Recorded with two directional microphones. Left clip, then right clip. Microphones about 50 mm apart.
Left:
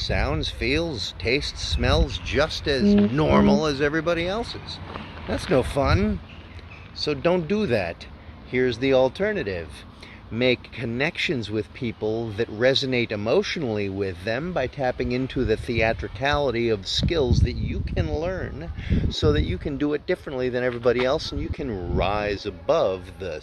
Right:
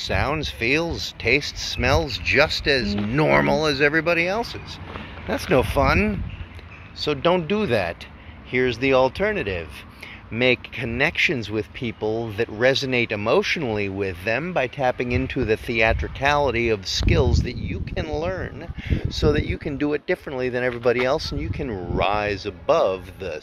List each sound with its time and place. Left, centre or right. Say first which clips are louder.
0.0 s speech: right 2 dB; left
1.2 s speech: right 4 dB; centre
3.3 s speech: right 4 dB; left; by 4.5 s centre
5.8 s speech: right 3 dB; centre
7.0 s speech: right 2 dB; centre
7.3 s speech: right 2 dB; left
21.4 s speech: right 1 dB; left